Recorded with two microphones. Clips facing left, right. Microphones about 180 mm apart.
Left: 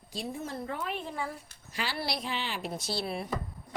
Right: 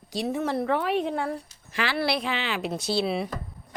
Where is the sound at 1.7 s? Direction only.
90° right.